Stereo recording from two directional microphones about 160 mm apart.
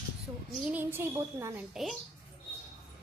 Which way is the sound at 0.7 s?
10° right (ahead or behind).